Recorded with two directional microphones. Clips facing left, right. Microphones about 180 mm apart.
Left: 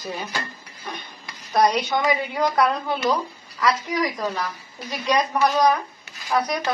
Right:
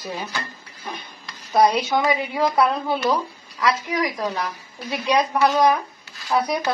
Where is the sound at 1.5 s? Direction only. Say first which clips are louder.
Right 2 dB; 10° right (ahead or behind).